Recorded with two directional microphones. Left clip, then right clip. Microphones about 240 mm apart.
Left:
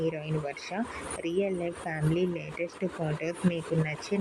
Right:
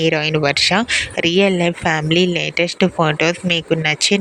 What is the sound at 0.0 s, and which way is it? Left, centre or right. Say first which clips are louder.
Speech: right 16 dB; right.